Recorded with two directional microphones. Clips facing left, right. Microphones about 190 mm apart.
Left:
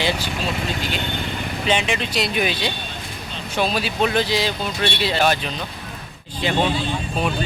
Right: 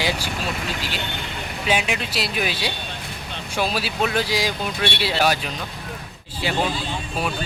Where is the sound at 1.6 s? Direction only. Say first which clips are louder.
Left 1 dB; 5° right (ahead or behind).